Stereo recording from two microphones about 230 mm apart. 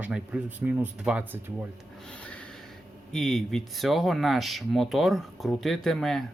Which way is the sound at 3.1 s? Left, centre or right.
Centre.